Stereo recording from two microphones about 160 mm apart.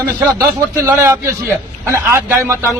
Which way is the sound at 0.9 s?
15° right (ahead or behind).